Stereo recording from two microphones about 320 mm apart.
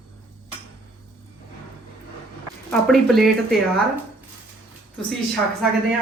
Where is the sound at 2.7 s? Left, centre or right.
Centre.